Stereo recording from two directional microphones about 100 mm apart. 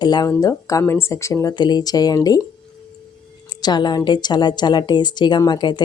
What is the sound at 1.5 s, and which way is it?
Speech, 45° left (ahead or behind).